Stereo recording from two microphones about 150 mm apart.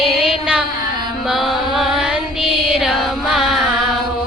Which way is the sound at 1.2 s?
Centre (ahead or behind).